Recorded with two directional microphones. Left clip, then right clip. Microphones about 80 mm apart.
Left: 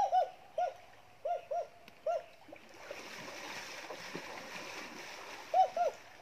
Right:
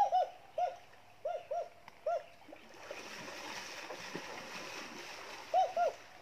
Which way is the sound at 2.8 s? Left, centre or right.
Centre.